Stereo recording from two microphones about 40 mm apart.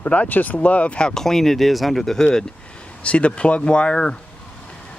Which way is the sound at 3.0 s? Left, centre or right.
Left.